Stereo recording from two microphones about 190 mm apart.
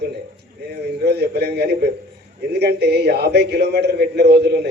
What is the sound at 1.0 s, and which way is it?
Speech, 60° right (ahead or behind).